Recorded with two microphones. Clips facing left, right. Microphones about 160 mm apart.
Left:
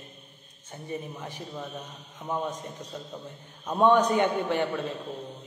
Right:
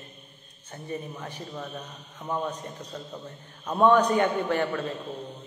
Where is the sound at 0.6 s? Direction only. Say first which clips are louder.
Right 1 dB; 10° left (ahead or behind).